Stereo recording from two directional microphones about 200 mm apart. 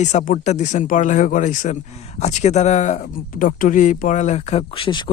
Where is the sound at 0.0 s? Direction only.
35° left (ahead or behind).